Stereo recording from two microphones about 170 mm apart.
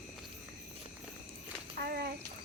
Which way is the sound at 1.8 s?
65° right (ahead or behind).